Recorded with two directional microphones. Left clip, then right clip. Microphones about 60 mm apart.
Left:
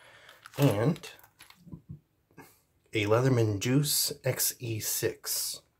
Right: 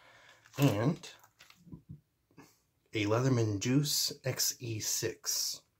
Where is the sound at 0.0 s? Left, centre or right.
Centre.